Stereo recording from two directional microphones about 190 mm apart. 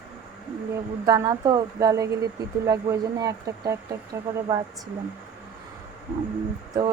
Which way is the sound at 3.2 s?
20° right (ahead or behind).